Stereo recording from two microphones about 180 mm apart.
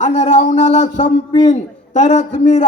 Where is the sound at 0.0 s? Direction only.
40° left (ahead or behind).